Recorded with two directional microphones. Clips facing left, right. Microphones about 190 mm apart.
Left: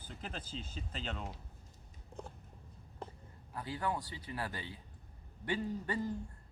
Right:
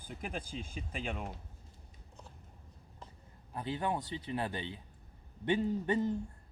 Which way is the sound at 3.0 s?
55° left (ahead or behind).